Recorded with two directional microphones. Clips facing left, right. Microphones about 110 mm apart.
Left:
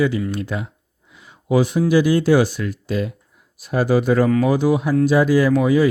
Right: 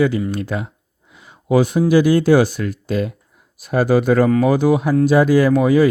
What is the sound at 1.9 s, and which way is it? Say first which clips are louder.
Speech: right 3 dB; 50° right (ahead or behind).